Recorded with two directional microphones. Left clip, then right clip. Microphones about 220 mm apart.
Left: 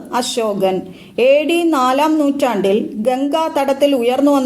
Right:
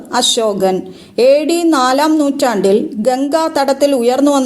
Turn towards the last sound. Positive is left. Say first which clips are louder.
# right 2 dB
turn(degrees=-35)  # may be behind; listen again after turning